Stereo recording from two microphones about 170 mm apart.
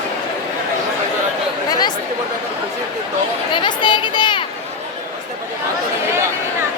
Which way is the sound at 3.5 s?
30° left (ahead or behind).